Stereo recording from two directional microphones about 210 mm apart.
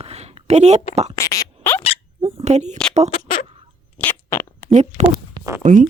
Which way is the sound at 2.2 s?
35° right (ahead or behind).